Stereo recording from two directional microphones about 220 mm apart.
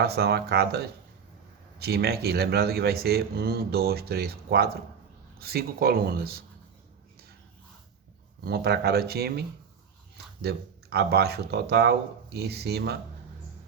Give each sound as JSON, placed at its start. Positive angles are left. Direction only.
{"t": 0.0, "sound": "speech", "side_deg": -45}
{"t": 8.4, "sound": "speech", "side_deg": -45}
{"t": 10.4, "sound": "speech", "side_deg": -45}